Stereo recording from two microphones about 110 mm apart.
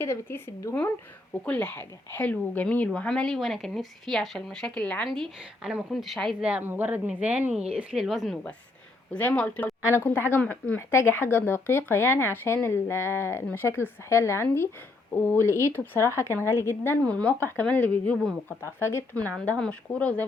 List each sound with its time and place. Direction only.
0.0 s a woman's voice: 25° left (ahead or behind); by 6.3 s centre (ahead or behind)
6.4 s a woman's voice: 15° right (ahead or behind)
9.1 s a woman's voice: 15° left (ahead or behind)
17.0 s a woman's voice: 10° left (ahead or behind)
18.4 s a woman's voice: 20° left (ahead or behind)